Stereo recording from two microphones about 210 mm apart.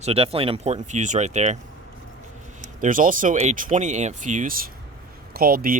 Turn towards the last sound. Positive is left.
turn(degrees=-45)  # may be behind; listen again after turning